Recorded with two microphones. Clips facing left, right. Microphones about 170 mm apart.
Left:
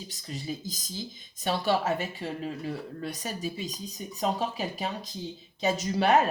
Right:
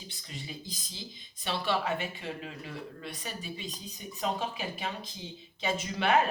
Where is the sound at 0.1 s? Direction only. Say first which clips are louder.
Left 8 dB; 40° left (ahead or behind).